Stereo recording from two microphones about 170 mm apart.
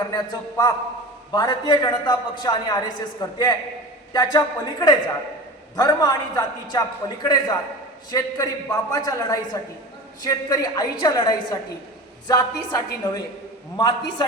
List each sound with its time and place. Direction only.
0.1 s a man's voice: 25° left (ahead or behind)